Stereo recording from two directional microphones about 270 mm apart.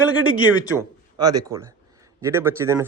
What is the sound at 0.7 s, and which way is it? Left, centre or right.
A man's voice, centre.